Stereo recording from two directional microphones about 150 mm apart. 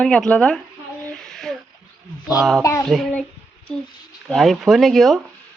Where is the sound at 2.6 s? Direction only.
20° left (ahead or behind).